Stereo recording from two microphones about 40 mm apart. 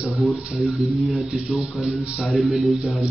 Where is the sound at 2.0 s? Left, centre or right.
Right.